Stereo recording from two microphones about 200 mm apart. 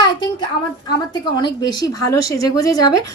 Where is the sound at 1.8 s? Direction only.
15° left (ahead or behind).